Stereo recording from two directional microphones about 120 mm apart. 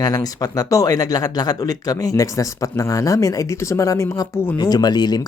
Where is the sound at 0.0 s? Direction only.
30° left (ahead or behind).